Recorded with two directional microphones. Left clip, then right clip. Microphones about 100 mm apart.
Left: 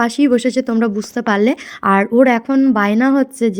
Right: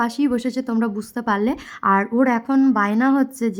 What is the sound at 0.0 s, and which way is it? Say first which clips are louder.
A woman's voice: left 7 dB; 35° left (ahead or behind).